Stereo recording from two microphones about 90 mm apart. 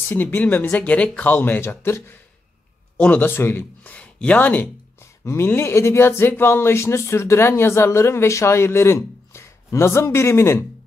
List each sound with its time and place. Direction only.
0.1 s speech: 25° left (ahead or behind)
5.2 s speech: 30° left (ahead or behind)